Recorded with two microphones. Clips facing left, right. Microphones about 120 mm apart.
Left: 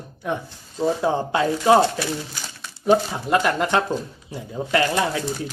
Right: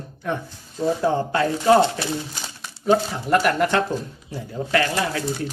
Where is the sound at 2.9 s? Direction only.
15° left (ahead or behind).